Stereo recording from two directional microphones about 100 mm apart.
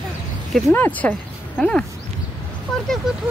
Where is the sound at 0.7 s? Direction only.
20° left (ahead or behind).